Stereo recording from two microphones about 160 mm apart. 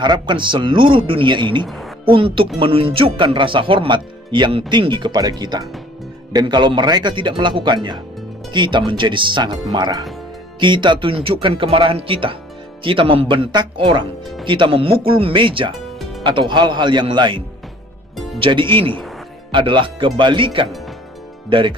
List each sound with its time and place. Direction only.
0.0 s speech: 30° right (ahead or behind)
18.1 s music: centre (ahead or behind)
18.4 s speech: 30° right (ahead or behind)